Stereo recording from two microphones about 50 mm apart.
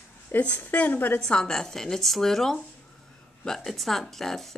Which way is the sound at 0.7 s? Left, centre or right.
Left.